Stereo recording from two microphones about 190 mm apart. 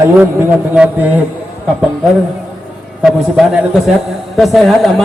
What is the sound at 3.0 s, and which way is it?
A man's voice, centre (ahead or behind).